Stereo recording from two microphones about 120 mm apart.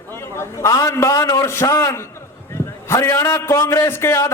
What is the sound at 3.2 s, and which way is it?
Speech, 15° left (ahead or behind).